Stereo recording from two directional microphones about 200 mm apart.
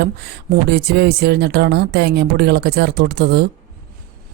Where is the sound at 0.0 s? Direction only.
55° right (ahead or behind).